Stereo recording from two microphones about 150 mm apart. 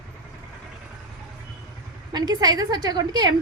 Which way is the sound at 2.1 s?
25° right (ahead or behind).